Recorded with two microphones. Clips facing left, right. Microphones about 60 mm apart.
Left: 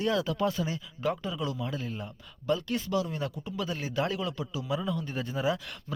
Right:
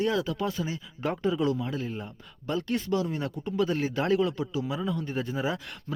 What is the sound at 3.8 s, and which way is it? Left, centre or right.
Speech, right.